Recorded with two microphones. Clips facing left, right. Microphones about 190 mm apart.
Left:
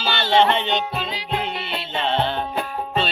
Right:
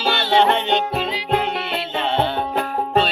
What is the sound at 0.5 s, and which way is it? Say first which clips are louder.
Music: right 3 dB; 65° right (ahead or behind).